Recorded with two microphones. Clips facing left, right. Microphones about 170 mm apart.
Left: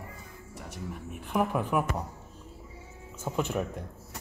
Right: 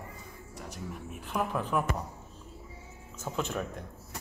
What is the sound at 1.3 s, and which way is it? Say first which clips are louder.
Speech: left 3 dB; 10° left (ahead or behind).